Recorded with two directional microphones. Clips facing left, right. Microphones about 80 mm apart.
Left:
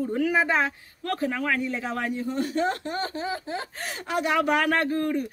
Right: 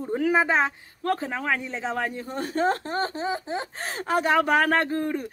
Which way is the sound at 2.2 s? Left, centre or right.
Right.